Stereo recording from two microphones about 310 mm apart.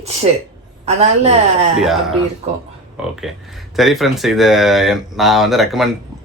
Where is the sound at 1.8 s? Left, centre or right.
Centre.